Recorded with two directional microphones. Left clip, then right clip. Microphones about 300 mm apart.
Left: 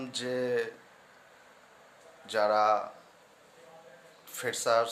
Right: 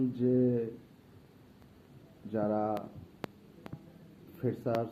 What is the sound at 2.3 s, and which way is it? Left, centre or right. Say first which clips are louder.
Speech: left 7 dB; centre.